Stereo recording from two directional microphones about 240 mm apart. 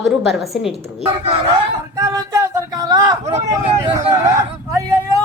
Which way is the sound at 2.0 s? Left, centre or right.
Centre.